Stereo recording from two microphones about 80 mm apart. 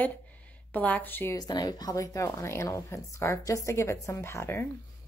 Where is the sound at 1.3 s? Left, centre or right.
Left.